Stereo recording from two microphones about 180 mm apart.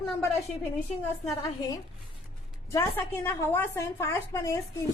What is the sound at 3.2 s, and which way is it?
A woman's voice, 15° left (ahead or behind).